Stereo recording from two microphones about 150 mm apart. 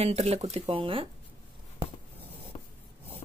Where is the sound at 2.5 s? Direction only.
40° left (ahead or behind).